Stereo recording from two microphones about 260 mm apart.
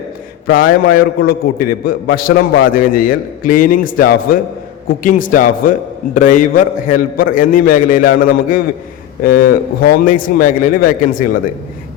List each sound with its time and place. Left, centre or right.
0.4 s a man's voice: left